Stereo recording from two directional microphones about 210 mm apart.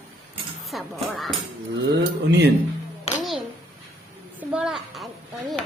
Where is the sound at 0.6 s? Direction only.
Centre (ahead or behind).